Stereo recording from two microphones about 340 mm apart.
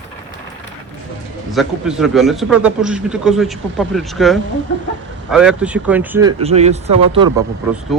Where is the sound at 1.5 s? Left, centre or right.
Centre.